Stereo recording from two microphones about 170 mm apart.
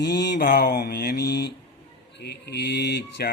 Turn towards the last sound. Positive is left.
turn(degrees=80)